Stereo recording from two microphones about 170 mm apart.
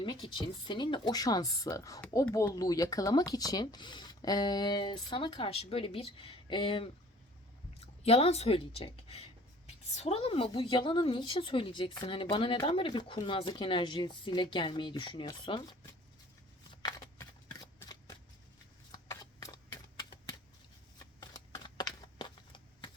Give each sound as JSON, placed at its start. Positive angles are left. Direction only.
{"t": 0.0, "sound": "speech", "side_deg": 25}
{"t": 16.8, "sound": "shuffling cards", "side_deg": 20}
{"t": 21.0, "sound": "a sound", "side_deg": 20}